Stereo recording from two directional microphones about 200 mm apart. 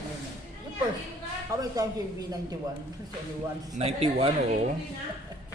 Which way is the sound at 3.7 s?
30° right (ahead or behind).